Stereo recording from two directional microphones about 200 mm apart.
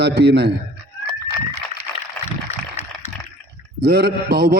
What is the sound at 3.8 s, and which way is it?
Mantra, 55° right (ahead or behind).